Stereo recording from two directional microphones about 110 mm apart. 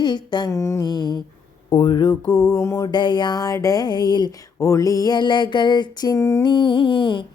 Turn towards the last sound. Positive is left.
turn(degrees=50)  # may be behind; listen again after turning